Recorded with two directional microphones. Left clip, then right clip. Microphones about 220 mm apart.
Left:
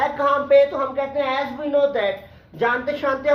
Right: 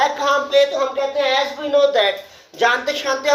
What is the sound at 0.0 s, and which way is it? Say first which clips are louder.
A man's voice: right 3 dB; 15° right (ahead or behind).